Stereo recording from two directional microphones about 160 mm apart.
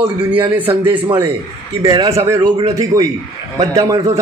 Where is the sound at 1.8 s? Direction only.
20° right (ahead or behind).